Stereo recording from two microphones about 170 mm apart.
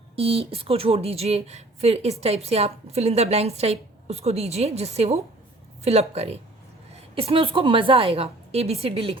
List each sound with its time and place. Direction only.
0.2 s speech: 35° right (ahead or behind)